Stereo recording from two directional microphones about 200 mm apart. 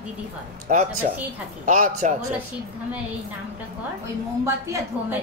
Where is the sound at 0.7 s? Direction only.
40° right (ahead or behind).